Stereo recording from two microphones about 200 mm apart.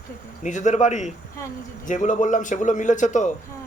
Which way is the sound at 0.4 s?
35° left (ahead or behind).